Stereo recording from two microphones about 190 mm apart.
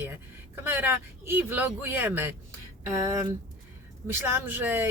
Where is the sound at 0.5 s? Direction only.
10° right (ahead or behind).